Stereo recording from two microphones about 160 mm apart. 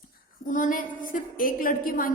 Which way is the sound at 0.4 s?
55° left (ahead or behind).